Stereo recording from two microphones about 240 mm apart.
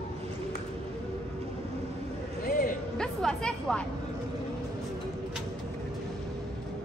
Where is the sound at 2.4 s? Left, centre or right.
Left.